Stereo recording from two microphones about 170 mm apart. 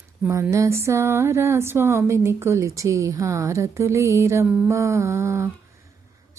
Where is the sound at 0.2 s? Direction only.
20° right (ahead or behind).